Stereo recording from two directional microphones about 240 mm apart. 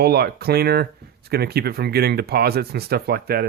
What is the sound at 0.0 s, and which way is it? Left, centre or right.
Speech, right.